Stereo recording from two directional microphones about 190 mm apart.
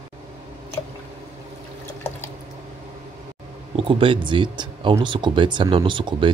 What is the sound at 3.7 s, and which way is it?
Speech, 30° right (ahead or behind).